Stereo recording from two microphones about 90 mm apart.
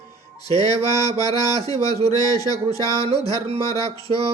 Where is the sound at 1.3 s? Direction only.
45° left (ahead or behind).